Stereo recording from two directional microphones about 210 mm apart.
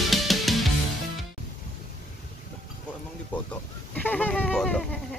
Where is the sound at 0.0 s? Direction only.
Centre (ahead or behind).